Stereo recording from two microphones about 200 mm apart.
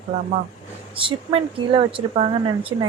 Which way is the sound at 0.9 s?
30° right (ahead or behind).